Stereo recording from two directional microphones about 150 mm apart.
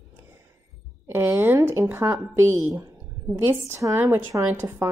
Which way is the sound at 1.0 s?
15° right (ahead or behind).